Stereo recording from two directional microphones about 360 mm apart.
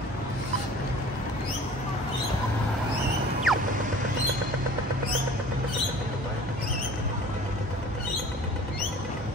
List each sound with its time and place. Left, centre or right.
3.5 s music: centre